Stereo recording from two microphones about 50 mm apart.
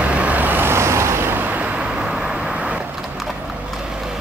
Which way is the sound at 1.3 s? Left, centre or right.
Right.